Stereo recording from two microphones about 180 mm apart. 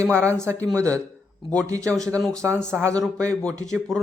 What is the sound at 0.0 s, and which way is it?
Speech, 15° right (ahead or behind).